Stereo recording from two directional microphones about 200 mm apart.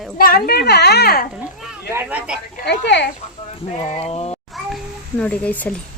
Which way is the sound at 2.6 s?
60° left (ahead or behind).